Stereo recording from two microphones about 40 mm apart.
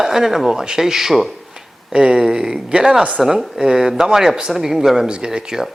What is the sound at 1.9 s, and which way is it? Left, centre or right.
A man's voice, right.